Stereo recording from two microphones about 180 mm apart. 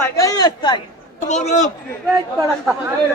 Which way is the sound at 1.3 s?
40° left (ahead or behind).